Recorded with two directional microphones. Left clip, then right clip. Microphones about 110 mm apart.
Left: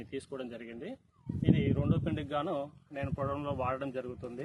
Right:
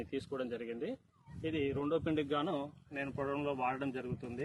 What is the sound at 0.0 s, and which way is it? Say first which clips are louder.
Speech: right 1 dB; 75° left (ahead or behind).